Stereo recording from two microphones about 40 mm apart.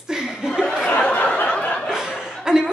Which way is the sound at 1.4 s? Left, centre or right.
Left.